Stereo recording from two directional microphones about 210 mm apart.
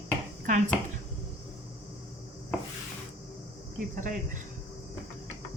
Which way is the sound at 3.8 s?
40° right (ahead or behind).